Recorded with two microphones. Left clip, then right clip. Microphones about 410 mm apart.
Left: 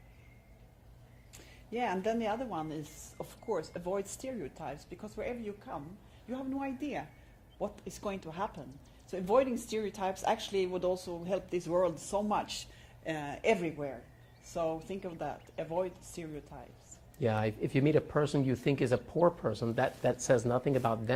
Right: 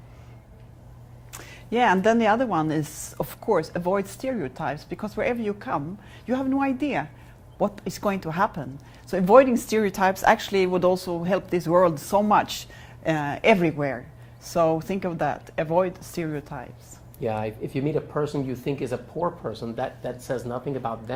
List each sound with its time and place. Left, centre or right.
1.3 s speech: right
17.2 s speech: left